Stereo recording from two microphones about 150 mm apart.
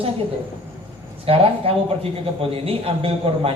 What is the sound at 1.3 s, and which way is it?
Speech, 40° right (ahead or behind).